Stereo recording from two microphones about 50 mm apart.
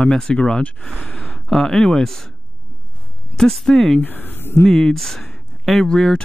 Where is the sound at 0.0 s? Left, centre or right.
Centre.